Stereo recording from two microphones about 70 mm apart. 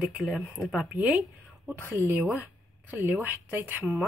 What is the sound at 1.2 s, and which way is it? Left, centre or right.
A woman's voice, right.